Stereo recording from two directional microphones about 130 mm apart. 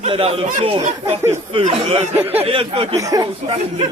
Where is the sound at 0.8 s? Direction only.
55° right (ahead or behind).